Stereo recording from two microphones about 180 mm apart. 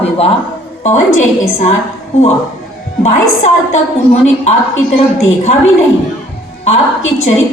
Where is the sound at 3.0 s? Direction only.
40° left (ahead or behind).